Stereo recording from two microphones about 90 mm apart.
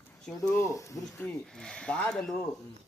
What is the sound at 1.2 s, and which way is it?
Speech, 15° left (ahead or behind).